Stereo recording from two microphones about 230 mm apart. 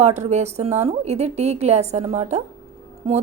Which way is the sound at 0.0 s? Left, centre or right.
Right.